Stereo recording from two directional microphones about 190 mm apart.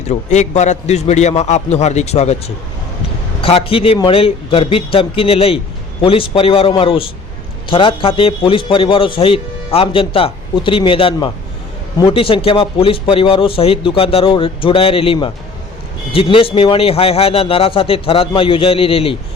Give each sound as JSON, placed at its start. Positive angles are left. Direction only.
{"t": 0.1, "sound": "a man's voice", "side_deg": 40}
{"t": 3.4, "sound": "a man's voice", "side_deg": 30}